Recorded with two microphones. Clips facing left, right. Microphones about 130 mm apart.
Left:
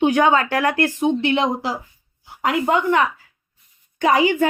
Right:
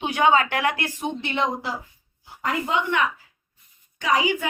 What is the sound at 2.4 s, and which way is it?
Speech, 70° left (ahead or behind).